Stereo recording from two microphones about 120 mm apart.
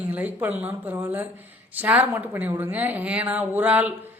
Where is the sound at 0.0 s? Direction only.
15° right (ahead or behind).